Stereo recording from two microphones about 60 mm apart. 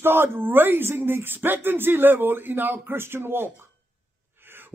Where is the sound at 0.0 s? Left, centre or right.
Right.